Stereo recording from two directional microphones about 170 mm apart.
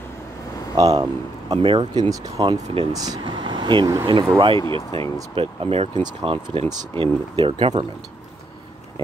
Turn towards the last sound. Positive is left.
turn(degrees=-35)  # may be behind; listen again after turning